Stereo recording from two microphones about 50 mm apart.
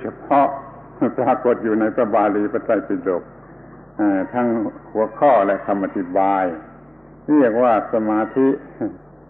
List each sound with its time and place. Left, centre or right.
0.0 s a man's voice: centre